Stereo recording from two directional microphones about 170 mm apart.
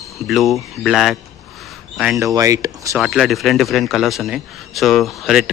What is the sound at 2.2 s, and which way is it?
Speech, 20° right (ahead or behind).